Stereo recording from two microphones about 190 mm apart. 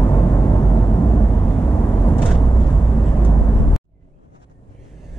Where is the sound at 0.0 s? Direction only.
25° left (ahead or behind).